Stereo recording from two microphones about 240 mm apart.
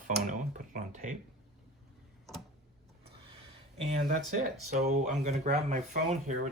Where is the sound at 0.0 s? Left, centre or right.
Right.